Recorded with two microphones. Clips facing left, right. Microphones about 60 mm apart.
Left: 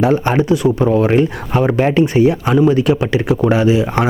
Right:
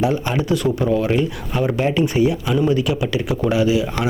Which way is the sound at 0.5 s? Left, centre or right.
Centre.